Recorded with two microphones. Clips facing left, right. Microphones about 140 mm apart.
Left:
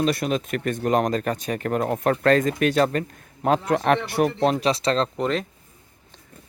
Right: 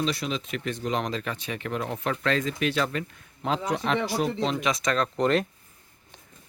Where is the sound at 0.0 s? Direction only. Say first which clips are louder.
Left 6 dB; 50° left (ahead or behind).